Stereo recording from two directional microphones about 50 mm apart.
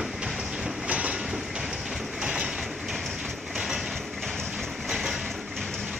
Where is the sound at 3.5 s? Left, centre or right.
Centre.